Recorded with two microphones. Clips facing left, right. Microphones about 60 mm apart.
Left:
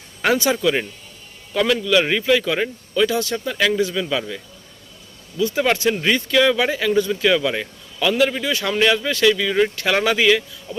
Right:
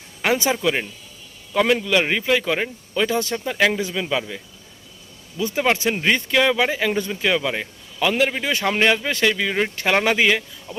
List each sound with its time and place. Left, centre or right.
0.3 s speech: right
3.3 s speech: centre
4.1 s speech: centre
5.4 s speech: right